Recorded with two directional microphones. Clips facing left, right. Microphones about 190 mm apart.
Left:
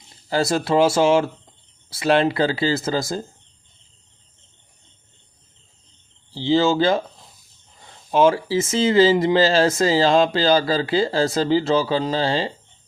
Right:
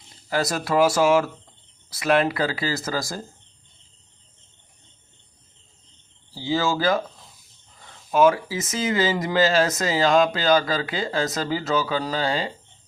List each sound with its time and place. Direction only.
0.3 s speech: 30° left (ahead or behind)
6.3 s speech: 25° left (ahead or behind)
8.1 s speech: 30° left (ahead or behind)